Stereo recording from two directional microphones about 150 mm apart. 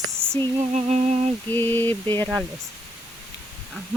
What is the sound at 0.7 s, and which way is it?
Humming, 45° right (ahead or behind).